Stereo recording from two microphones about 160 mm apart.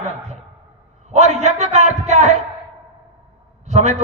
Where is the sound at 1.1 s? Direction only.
45° right (ahead or behind).